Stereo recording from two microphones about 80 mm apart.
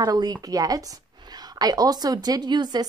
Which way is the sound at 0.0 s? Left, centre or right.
Right.